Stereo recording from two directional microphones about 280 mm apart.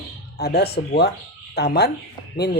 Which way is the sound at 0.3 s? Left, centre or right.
Left.